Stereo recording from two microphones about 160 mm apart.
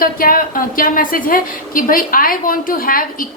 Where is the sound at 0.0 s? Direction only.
65° left (ahead or behind).